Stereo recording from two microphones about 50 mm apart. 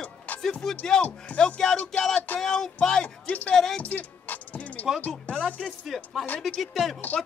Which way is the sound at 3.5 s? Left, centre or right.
Centre.